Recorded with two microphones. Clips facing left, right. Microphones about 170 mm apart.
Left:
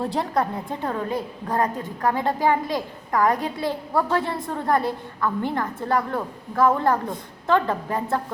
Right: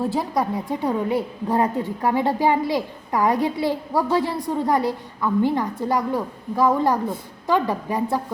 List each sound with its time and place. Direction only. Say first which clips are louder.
0.0 s a woman's voice: right 1 dB; 5° right (ahead or behind)